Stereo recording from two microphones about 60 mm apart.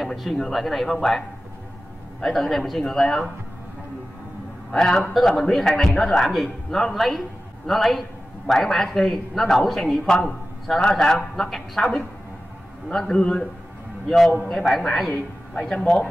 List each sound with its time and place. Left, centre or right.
0.0 s a man's voice: centre
2.2 s a man's voice: centre
4.6 s a man's voice: centre
14.0 s a man's voice: centre
15.0 s a man's voice: left